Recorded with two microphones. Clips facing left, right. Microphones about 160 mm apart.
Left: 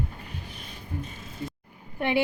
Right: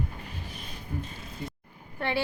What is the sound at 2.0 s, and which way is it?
Speech, 15° left (ahead or behind).